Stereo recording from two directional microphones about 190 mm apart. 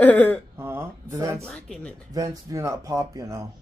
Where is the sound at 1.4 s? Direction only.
5° left (ahead or behind).